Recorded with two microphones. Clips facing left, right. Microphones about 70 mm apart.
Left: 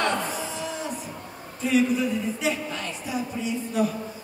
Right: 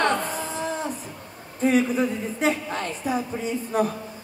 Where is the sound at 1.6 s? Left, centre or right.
Right.